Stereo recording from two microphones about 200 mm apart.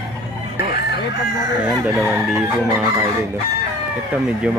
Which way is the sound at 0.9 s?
55° left (ahead or behind).